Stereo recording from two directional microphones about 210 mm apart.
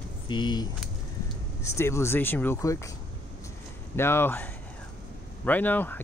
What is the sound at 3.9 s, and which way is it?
Speech, 10° left (ahead or behind).